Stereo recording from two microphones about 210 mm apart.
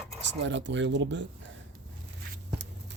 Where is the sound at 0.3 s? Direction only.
60° right (ahead or behind).